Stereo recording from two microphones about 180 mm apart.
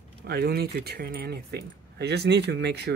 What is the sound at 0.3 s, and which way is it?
Speech, 60° right (ahead or behind).